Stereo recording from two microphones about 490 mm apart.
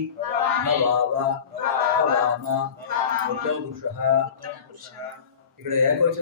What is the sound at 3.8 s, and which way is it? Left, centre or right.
Speech, right.